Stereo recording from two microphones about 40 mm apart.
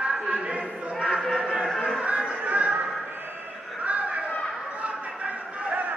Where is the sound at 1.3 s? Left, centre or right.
Centre.